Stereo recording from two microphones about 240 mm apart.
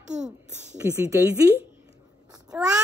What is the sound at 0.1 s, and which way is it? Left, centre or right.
Speech, right.